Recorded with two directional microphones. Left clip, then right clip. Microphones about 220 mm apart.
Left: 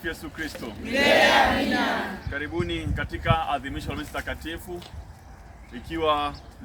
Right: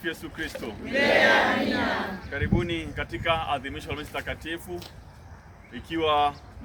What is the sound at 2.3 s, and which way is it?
Speech, centre (ahead or behind).